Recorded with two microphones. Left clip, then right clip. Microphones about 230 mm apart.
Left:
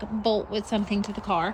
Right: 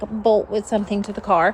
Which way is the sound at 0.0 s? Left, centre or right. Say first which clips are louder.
Right 8 dB; centre.